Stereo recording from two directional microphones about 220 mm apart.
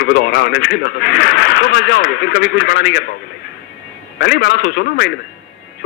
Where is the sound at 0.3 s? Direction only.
45° left (ahead or behind).